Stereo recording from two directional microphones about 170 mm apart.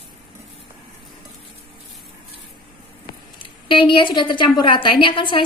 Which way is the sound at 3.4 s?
30° left (ahead or behind).